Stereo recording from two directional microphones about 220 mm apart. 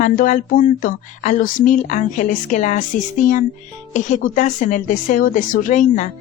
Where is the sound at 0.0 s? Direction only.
35° left (ahead or behind).